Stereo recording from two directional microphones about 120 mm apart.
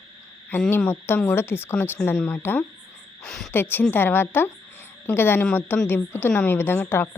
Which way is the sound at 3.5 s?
15° left (ahead or behind).